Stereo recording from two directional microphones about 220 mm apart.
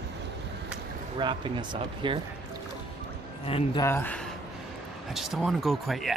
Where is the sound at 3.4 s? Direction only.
25° left (ahead or behind).